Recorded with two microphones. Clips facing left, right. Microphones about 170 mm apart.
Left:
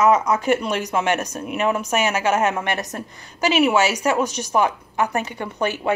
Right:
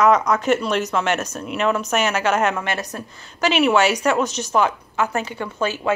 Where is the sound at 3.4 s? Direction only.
10° left (ahead or behind).